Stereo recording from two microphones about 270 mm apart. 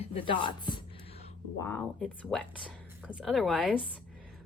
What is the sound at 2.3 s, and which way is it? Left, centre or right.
A woman's voice, centre.